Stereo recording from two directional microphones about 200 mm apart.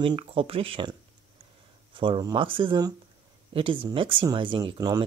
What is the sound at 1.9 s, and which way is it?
Speech, 25° right (ahead or behind).